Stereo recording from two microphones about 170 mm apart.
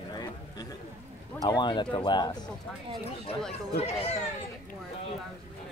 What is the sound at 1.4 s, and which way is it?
Speech, 25° left (ahead or behind).